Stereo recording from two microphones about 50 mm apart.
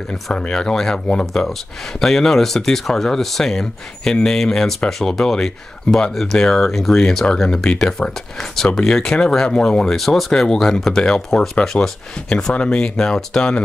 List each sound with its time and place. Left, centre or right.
0.1 s speech: centre
1.2 s speech: centre
8.4 s speech: centre
12.5 s speech: left
12.9 s speech: centre